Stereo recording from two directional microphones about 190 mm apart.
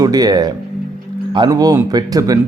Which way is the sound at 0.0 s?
20° right (ahead or behind).